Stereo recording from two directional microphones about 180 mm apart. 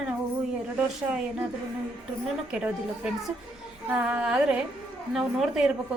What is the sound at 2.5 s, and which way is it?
Speech, 5° right (ahead or behind).